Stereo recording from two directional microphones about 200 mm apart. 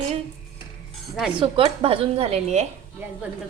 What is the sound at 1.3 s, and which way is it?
Speech, 25° right (ahead or behind).